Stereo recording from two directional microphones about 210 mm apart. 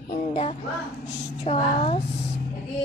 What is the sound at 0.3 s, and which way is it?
Child singing, 30° left (ahead or behind).